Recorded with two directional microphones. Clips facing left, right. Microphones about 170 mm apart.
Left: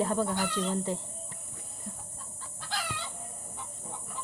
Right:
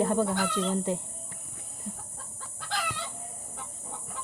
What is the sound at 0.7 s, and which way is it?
Speech, 15° right (ahead or behind).